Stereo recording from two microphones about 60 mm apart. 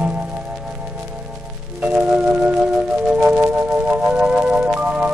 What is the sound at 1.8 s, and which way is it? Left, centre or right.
Music, right.